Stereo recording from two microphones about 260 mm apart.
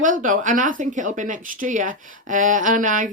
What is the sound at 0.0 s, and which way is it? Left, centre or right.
Speech, right.